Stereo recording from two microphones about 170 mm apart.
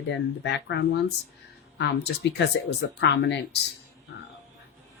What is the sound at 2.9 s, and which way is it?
Speech, 90° left.